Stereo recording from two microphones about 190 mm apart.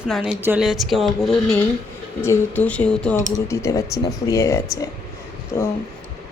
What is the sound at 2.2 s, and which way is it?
Speech, 10° left (ahead or behind).